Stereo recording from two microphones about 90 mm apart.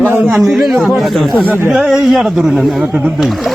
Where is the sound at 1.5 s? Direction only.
20° right (ahead or behind).